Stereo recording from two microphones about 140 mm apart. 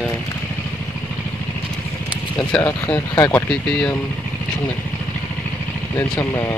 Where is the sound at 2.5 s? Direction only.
10° left (ahead or behind).